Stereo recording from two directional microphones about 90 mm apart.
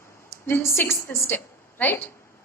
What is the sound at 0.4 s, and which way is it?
A man's voice, 25° left (ahead or behind).